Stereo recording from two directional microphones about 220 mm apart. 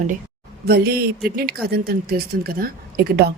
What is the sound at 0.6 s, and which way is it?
A woman's voice, 45° right (ahead or behind).